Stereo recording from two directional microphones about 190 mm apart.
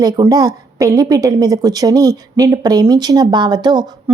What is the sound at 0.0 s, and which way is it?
A woman's voice, 20° right (ahead or behind).